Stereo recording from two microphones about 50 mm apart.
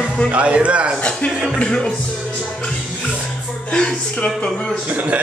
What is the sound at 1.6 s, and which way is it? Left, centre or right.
Speech, centre.